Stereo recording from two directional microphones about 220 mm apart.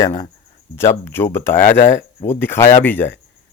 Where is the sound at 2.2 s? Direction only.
10° left (ahead or behind).